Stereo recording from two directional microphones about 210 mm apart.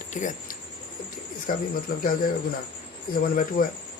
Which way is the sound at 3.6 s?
45° left (ahead or behind).